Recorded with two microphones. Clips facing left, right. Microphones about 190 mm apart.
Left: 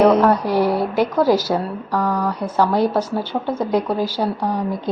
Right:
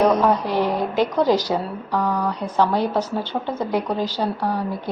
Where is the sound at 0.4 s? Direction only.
10° left (ahead or behind).